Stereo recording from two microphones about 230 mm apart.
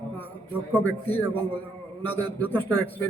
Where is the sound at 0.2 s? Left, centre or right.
Centre.